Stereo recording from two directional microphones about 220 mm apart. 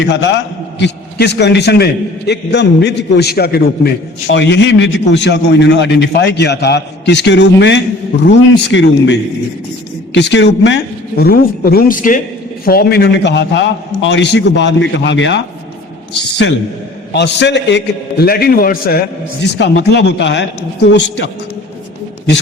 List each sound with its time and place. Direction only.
0.0 s a man's voice: 55° left (ahead or behind)
17.1 s a man's voice: 50° left (ahead or behind)